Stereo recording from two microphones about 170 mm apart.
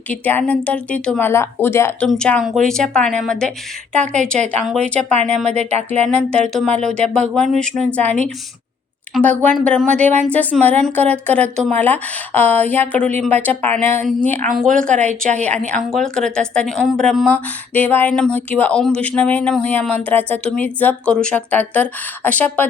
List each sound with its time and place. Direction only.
0.1 s a woman's voice: 10° left (ahead or behind)
5.5 s music: 40° right (ahead or behind)
5.9 s a woman's voice: 5° left (ahead or behind)